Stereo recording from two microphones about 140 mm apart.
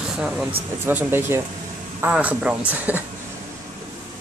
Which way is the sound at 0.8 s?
15° right (ahead or behind).